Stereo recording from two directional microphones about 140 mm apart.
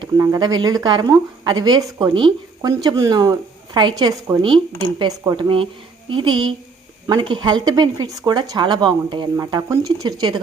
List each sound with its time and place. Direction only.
0.0 s speech: 25° right (ahead or behind)